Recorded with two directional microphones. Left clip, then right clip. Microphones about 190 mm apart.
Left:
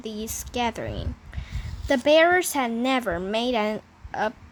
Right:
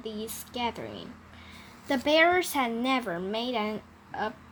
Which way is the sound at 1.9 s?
25° left (ahead or behind).